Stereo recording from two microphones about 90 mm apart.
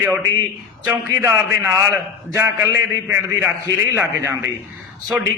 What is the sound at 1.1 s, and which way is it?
A man's voice, 35° right (ahead or behind).